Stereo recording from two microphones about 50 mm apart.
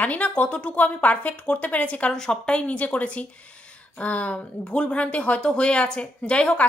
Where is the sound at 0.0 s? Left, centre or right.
Left.